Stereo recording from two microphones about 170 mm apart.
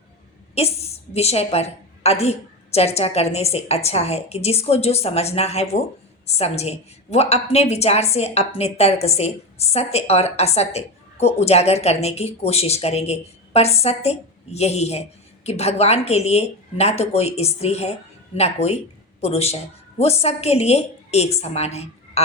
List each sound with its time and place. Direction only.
0.5 s a woman's voice: 35° left (ahead or behind)